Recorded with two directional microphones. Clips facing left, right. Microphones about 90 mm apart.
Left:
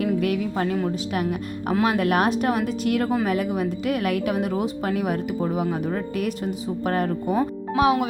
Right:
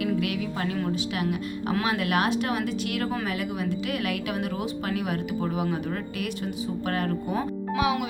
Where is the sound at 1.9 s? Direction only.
40° left (ahead or behind).